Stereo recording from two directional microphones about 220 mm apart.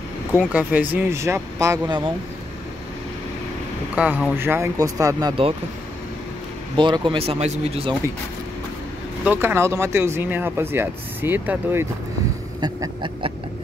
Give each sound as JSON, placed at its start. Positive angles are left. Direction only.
{"t": 0.5, "sound": "speech", "side_deg": -5}
{"t": 3.9, "sound": "speech", "side_deg": -5}
{"t": 6.8, "sound": "speech", "side_deg": -20}
{"t": 9.2, "sound": "speech", "side_deg": -10}
{"t": 12.5, "sound": "a sound", "side_deg": -20}